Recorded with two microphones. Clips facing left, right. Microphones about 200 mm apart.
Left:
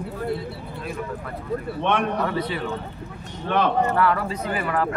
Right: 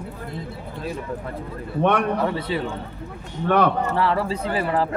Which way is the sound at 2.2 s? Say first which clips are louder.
Right 1 dB; 25° right (ahead or behind).